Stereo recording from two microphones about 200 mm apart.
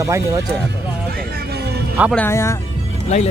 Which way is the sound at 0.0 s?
15° right (ahead or behind).